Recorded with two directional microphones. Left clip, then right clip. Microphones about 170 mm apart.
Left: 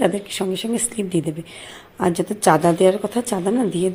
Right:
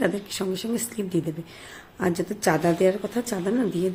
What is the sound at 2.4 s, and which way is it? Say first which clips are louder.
Speech: left 7 dB; 15° left (ahead or behind).